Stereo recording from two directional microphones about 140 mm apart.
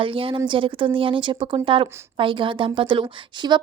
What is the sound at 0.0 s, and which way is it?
Speech, 40° right (ahead or behind).